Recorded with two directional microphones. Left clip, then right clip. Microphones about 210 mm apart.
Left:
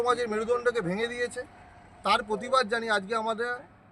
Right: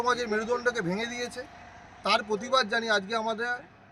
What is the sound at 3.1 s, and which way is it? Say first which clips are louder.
Speech: even; 10° right (ahead or behind).